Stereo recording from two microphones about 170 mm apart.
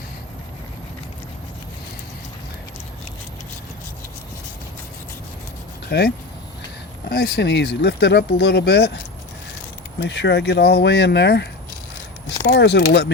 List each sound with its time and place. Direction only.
5.9 s speech: 75° left (ahead or behind)
10.0 s speech: 90° left
12.5 s speech: 80° left